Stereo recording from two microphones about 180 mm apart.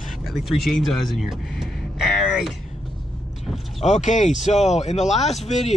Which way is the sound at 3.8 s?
40° left (ahead or behind).